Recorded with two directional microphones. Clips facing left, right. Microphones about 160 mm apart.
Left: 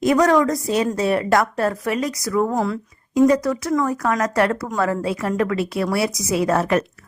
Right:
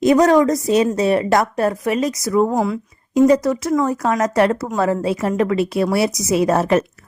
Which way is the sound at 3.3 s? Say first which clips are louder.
Right 3 dB; 20° right (ahead or behind).